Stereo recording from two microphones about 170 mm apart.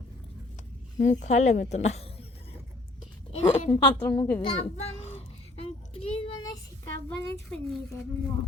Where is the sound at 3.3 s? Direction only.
35° left (ahead or behind).